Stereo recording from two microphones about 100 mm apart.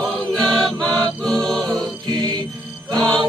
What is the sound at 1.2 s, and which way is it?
Choir, 5° left (ahead or behind).